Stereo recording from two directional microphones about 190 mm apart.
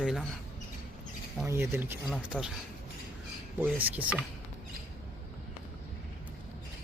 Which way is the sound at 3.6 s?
10° right (ahead or behind).